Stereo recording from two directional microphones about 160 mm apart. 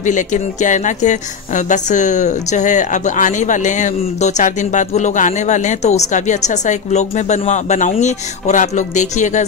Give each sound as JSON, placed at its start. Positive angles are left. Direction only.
{"t": 0.0, "sound": "speech", "side_deg": 50}